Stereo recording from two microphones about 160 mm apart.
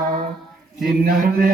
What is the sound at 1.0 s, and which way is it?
Mantra, 60° right (ahead or behind).